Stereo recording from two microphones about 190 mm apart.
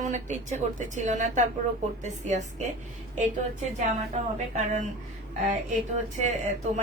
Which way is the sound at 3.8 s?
40° right (ahead or behind).